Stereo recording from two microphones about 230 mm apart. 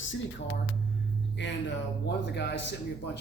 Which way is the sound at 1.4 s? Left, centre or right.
Left.